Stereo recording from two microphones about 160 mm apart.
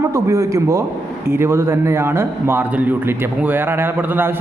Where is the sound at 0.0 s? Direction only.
20° right (ahead or behind).